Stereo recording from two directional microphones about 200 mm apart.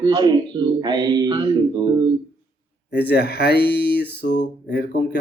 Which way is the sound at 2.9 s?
55° left (ahead or behind).